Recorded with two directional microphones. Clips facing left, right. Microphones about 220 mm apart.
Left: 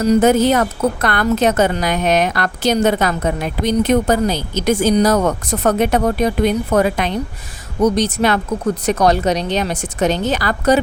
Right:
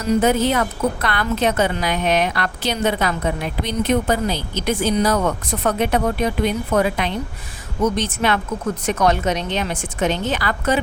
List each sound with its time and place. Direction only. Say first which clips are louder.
0.0 s a woman's voice: left 5 dB; 40° left (ahead or behind)